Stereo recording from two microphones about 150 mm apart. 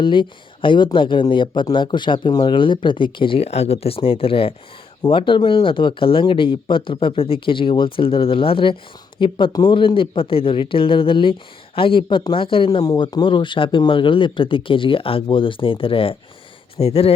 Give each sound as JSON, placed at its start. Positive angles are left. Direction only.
{"t": 0.0, "sound": "a man's voice", "side_deg": 35}